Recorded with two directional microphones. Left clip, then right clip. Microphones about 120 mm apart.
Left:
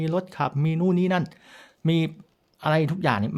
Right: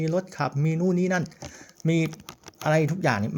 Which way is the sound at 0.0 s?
15° left (ahead or behind).